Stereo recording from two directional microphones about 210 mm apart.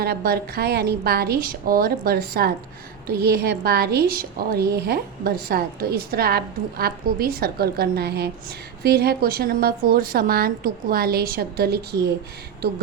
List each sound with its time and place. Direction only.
0.0 s a woman's voice: 45° right (ahead or behind)